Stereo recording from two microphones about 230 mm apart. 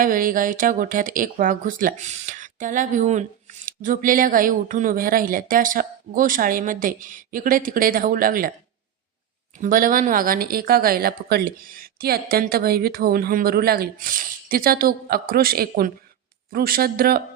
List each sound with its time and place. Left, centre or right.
0.0 s speech: right
9.6 s speech: right